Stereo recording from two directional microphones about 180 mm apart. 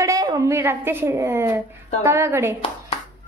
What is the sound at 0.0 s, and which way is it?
A woman's voice, 20° right (ahead or behind).